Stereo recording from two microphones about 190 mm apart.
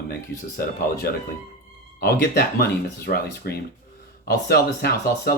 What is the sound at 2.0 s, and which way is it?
Speech, 55° left (ahead or behind).